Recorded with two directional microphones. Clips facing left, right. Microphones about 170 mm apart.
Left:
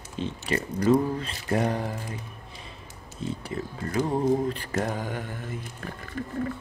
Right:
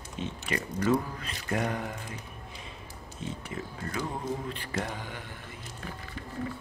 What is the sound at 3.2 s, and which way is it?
Speech, 35° left (ahead or behind).